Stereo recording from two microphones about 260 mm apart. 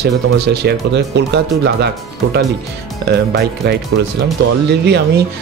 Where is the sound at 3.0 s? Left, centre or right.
Right.